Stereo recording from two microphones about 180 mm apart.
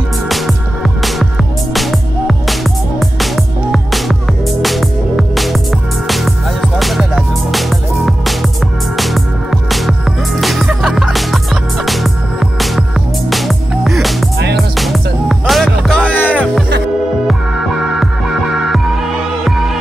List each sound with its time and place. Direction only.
1.0 s music: centre (ahead or behind)
19.4 s music: centre (ahead or behind)